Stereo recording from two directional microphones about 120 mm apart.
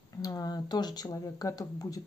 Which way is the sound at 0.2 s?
30° left (ahead or behind).